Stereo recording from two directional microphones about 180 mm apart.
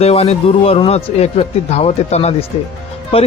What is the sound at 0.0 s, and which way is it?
Speech, 35° left (ahead or behind).